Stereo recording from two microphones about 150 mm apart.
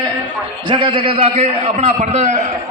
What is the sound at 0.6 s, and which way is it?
A man's voice, 35° right (ahead or behind).